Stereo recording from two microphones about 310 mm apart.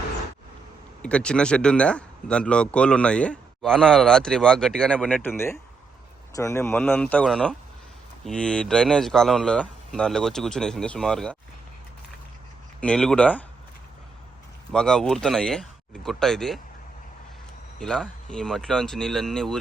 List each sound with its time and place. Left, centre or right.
1.0 s speech: centre
12.8 s speech: centre
14.7 s speech: centre
17.7 s speech: centre